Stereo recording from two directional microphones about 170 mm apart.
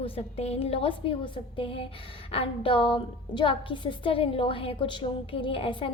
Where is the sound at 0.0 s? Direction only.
35° left (ahead or behind).